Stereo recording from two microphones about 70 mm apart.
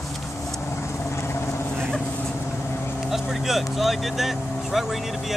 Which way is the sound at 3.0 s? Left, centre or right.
Centre.